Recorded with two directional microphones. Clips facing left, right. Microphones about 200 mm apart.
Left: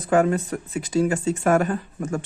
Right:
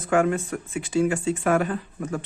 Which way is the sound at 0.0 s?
35° left (ahead or behind).